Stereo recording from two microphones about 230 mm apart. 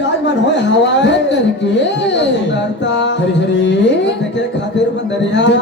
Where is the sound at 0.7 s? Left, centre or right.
Left.